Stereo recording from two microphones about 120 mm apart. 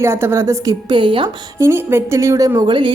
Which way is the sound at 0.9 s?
45° right (ahead or behind).